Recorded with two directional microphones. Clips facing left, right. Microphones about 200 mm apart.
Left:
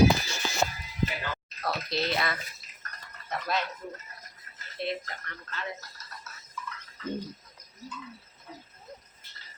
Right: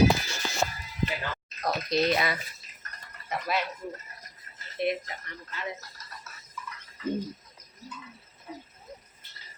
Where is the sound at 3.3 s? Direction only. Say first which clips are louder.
Right 1 dB; 10° right (ahead or behind).